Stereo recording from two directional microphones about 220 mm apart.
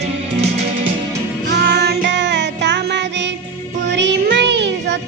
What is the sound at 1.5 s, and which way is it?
Music, 50° right (ahead or behind).